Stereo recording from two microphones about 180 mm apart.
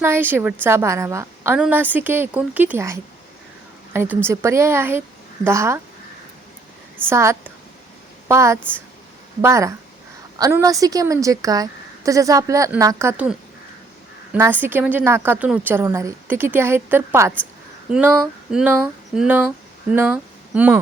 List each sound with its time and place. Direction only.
0.0 s a woman's voice: 10° right (ahead or behind)
7.0 s a woman's voice: 15° right (ahead or behind)
14.3 s a woman's voice: 10° right (ahead or behind)
18.5 s a woman's voice: 10° right (ahead or behind)